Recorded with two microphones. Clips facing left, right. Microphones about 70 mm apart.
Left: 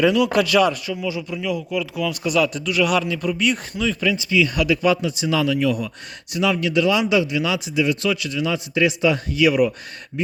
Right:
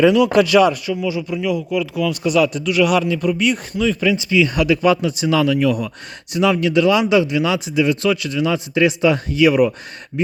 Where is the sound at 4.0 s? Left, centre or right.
Right.